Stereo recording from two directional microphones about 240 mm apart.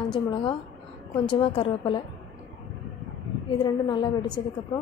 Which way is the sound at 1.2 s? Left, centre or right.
Left.